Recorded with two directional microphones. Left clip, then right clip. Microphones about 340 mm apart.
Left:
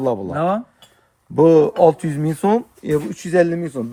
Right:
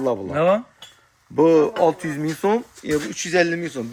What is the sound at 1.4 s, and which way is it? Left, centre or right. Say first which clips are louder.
Speech: left 4 dB; left.